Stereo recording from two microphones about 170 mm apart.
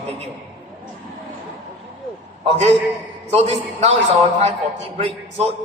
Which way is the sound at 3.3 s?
40° right (ahead or behind).